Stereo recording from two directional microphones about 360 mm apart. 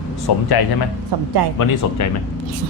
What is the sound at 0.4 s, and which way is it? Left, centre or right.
Speech, left.